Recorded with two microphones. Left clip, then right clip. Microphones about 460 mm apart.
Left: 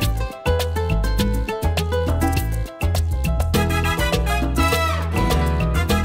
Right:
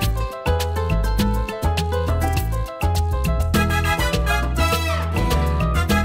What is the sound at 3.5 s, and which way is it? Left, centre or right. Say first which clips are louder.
Music: right 1 dB; left.